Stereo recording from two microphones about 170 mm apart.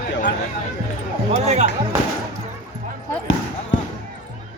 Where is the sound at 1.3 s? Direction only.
40° right (ahead or behind).